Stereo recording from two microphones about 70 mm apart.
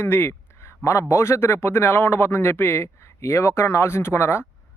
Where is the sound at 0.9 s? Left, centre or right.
Left.